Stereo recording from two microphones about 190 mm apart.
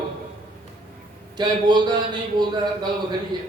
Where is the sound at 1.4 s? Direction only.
25° right (ahead or behind).